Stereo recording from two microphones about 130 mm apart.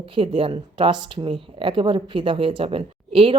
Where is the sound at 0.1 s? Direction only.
40° right (ahead or behind).